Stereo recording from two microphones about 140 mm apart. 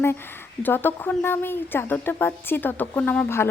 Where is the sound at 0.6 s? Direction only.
15° left (ahead or behind).